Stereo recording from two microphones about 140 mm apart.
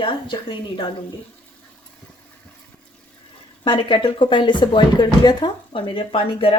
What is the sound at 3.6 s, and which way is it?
Speech, 35° left (ahead or behind).